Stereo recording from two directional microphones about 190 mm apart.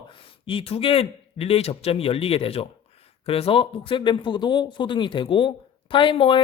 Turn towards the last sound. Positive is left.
turn(degrees=25)  # may be behind; listen again after turning